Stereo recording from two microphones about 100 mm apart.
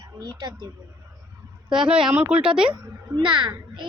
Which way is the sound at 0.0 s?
40° right (ahead or behind).